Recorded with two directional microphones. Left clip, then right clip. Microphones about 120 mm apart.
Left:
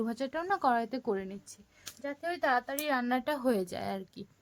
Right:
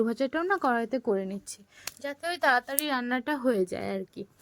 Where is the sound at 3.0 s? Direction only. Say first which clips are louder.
Right 2 dB; 30° right (ahead or behind).